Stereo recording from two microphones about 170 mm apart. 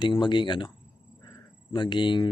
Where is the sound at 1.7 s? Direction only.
25° left (ahead or behind).